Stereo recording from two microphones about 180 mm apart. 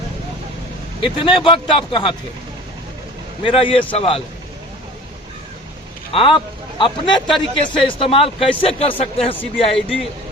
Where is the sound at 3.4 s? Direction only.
30° left (ahead or behind).